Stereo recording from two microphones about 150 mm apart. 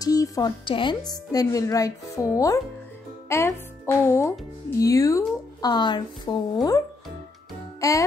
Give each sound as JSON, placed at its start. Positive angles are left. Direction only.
{"t": 0.0, "sound": "a sound", "side_deg": 25}
{"t": 0.7, "sound": "speech", "side_deg": 35}
{"t": 7.8, "sound": "music", "side_deg": 20}